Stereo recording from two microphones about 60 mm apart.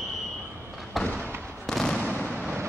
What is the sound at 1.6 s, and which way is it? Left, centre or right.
Fireworks, centre.